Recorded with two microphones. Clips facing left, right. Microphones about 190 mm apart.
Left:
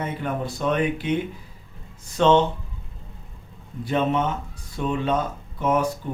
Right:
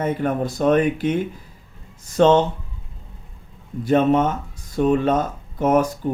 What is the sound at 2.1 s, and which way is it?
Speech, 45° right (ahead or behind).